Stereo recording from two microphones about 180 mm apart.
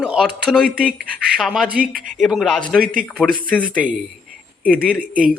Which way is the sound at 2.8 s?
50° right (ahead or behind).